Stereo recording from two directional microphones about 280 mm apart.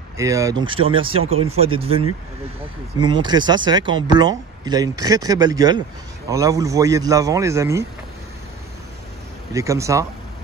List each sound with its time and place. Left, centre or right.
0.2 s speech: centre
9.5 s speech: centre